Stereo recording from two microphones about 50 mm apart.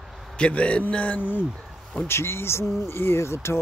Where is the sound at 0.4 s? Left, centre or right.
Left.